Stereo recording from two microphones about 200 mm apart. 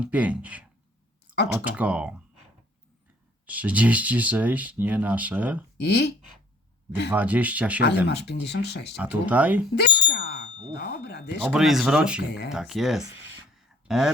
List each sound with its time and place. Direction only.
0.0 s speech: 5° right (ahead or behind)
3.4 s speech: 5° right (ahead or behind)
5.7 s speech: 60° left (ahead or behind)
7.1 s speech: 10° right (ahead or behind)
8.0 s speech: 55° left (ahead or behind)
9.0 s speech: 5° right (ahead or behind)
9.7 s a sound: 55° left (ahead or behind)
10.8 s speech: 55° left (ahead or behind)
11.4 s speech: centre (ahead or behind)